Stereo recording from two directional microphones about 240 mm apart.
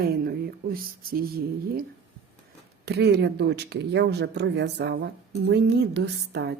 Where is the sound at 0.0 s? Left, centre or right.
Right.